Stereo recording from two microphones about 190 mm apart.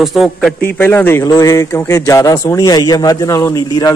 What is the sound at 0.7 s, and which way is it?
Speech, 10° left (ahead or behind).